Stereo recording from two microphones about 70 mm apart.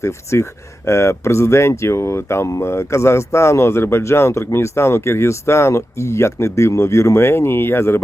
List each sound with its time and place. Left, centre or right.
0.0 s speech: left